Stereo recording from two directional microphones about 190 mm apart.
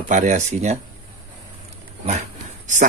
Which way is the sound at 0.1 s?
40° right (ahead or behind).